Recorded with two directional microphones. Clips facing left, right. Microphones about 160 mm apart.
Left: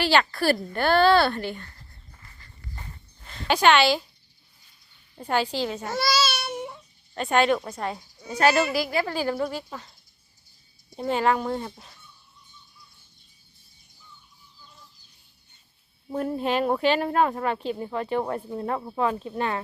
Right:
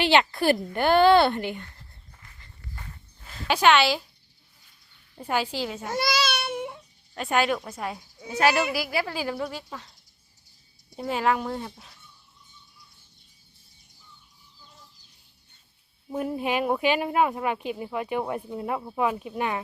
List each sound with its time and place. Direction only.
0.0 s a woman's voice: 20° right (ahead or behind)
3.2 s speech: 5° right (ahead or behind)
5.3 s speech: 10° right (ahead or behind)
7.1 s speech: 5° right (ahead or behind)
11.1 s speech: 5° right (ahead or behind)
16.1 s speech: 10° right (ahead or behind)